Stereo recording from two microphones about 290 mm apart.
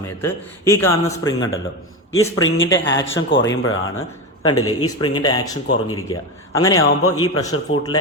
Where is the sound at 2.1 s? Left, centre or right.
Left.